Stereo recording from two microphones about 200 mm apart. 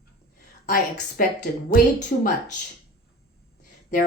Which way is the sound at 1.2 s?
45° left (ahead or behind).